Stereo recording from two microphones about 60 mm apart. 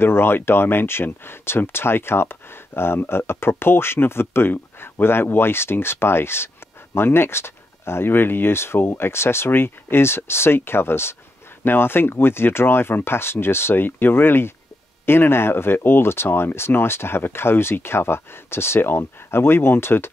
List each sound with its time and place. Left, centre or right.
0.0 s speech: left